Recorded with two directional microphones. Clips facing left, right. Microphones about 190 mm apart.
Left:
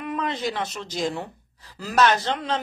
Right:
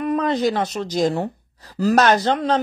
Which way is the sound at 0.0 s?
40° right (ahead or behind).